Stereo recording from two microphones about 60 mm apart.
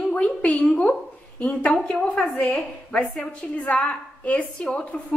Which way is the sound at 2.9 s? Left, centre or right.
Centre.